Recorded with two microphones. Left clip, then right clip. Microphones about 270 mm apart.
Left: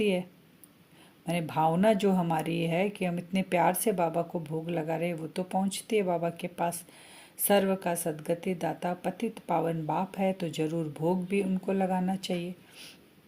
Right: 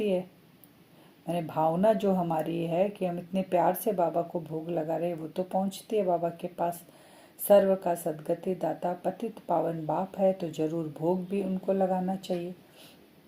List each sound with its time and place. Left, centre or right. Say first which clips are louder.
1.3 s speech: even; left